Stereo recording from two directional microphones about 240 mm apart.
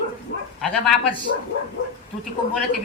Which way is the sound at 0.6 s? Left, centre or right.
Centre.